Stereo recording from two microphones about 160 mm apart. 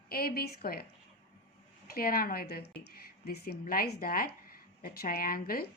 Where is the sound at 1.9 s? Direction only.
70° left (ahead or behind).